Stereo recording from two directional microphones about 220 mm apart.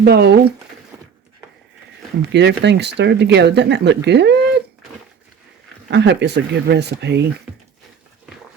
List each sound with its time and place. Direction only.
0.0 s speech: 50° right (ahead or behind)
2.3 s speech: 50° right (ahead or behind)
5.9 s speech: 50° right (ahead or behind)